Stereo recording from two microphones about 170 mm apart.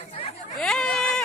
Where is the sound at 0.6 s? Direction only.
5° left (ahead or behind).